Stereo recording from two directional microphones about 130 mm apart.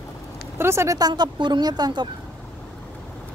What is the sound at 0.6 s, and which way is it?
Speech, 20° right (ahead or behind).